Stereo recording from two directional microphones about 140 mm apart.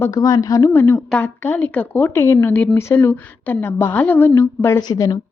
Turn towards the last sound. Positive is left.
turn(degrees=25)  # may be behind; listen again after turning